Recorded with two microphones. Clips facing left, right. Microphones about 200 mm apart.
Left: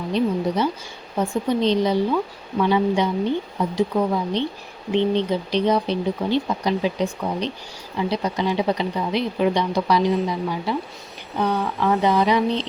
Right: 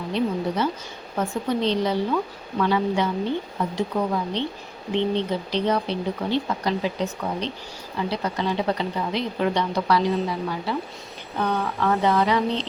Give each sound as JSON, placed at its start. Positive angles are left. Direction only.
{"t": 0.1, "sound": "speech", "side_deg": 15}